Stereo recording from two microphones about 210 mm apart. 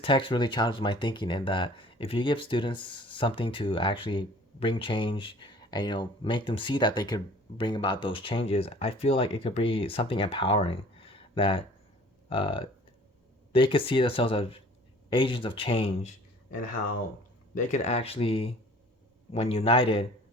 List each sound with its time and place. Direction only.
0.0 s speech: 25° left (ahead or behind)
17.5 s speech: 35° left (ahead or behind)